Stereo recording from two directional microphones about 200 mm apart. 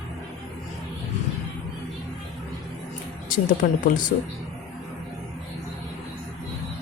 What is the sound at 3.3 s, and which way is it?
Speech, 40° left (ahead or behind).